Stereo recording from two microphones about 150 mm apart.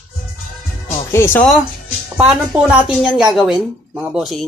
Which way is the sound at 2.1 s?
5° right (ahead or behind).